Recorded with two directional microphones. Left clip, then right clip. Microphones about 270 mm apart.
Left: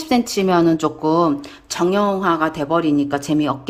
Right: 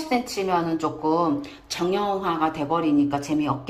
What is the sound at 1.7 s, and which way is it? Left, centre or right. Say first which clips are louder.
Speech: left 6 dB; centre.